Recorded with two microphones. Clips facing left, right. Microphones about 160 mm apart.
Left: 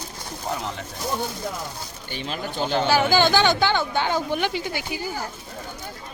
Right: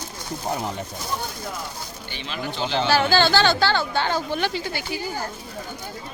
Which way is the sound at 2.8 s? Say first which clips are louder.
Even; 15° left (ahead or behind).